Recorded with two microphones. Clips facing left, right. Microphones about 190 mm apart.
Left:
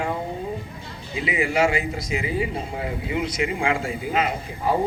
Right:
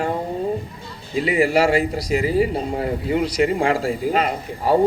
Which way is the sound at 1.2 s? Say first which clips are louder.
Right 4 dB; 35° right (ahead or behind).